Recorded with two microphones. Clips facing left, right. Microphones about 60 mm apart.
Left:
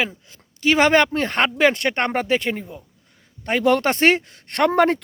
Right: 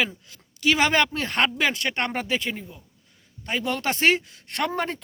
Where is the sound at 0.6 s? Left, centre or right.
Left.